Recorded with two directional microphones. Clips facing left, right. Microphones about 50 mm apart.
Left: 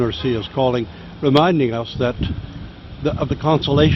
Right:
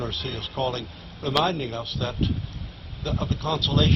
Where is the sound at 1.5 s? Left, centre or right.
Left.